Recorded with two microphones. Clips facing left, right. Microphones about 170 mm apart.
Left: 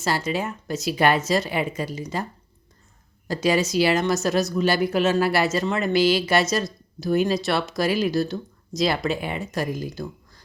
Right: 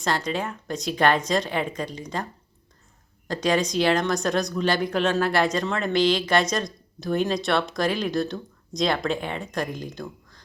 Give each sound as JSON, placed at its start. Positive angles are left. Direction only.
{"t": 0.0, "sound": "a woman's voice", "side_deg": 5}
{"t": 3.2, "sound": "a woman's voice", "side_deg": 5}